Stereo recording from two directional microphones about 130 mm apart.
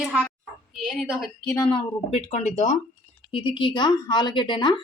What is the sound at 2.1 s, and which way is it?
Speech, 50° left (ahead or behind).